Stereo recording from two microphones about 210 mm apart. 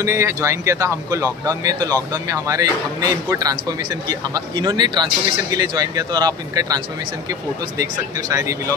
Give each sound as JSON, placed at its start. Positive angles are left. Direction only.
{"t": 0.0, "sound": "speech", "side_deg": -15}